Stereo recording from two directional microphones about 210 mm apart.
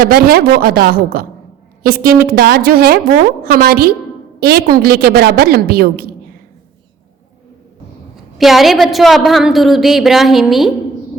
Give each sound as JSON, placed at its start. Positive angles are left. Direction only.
{"t": 0.0, "sound": "a woman's voice", "side_deg": -45}
{"t": 8.1, "sound": "a woman's voice", "side_deg": 0}